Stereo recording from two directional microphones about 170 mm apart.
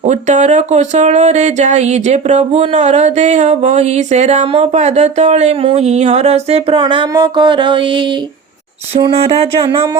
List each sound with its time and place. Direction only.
0.0 s speech: 45° right (ahead or behind); by 10.0 s 25° right (ahead or behind)